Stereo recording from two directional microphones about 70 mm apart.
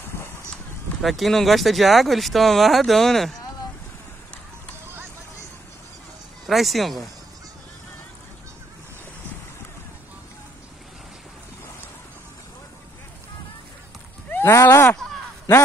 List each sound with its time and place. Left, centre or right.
1.0 s speech: centre
6.4 s speech: centre
14.4 s speech: left